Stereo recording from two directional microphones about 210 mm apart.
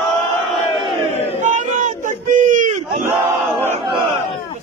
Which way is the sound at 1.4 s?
35° right (ahead or behind).